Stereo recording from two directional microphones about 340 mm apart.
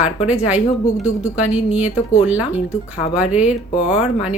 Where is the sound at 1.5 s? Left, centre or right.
Centre.